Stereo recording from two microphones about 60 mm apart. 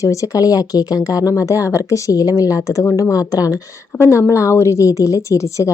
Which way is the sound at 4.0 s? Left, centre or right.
Left.